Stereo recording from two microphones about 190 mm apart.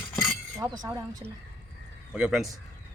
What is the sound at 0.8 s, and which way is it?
Speech, 20° right (ahead or behind).